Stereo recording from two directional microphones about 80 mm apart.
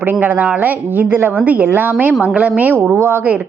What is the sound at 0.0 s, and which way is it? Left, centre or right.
A woman's voice, right.